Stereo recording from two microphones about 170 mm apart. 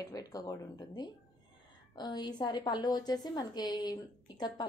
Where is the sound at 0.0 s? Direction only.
20° left (ahead or behind).